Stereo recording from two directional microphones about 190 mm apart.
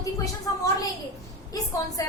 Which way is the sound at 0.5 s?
20° left (ahead or behind).